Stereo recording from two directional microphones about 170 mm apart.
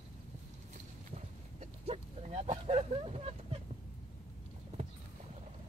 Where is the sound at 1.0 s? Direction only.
40° right (ahead or behind).